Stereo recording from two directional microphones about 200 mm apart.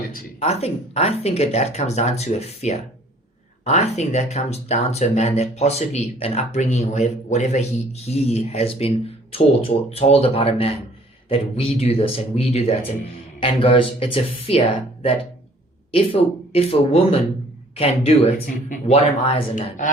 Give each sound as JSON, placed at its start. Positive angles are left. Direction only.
{"t": 0.3, "sound": "speech", "side_deg": 30}
{"t": 16.5, "sound": "speech", "side_deg": 30}